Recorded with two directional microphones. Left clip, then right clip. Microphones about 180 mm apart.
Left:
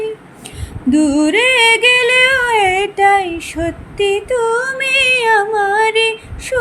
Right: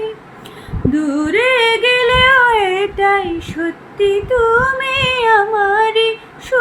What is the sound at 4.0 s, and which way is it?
Female singing, 35° left (ahead or behind).